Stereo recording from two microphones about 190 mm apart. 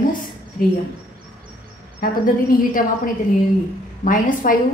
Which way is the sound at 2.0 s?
50° left (ahead or behind).